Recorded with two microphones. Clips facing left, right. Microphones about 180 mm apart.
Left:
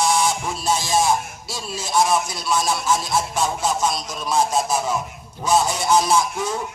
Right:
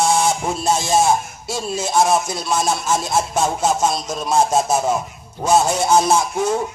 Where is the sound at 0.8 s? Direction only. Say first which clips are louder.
Right 3 dB; 25° right (ahead or behind).